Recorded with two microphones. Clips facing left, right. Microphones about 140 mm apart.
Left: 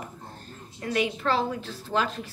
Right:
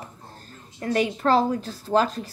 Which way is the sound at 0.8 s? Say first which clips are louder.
Right 4 dB; 40° right (ahead or behind).